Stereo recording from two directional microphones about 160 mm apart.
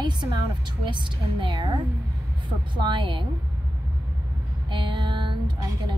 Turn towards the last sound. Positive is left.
turn(degrees=-30)  # may be behind; listen again after turning